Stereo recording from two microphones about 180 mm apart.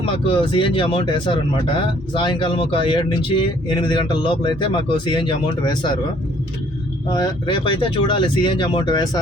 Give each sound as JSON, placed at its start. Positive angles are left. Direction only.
{"t": 0.0, "sound": "speech", "side_deg": 30}
{"t": 7.1, "sound": "speech", "side_deg": 25}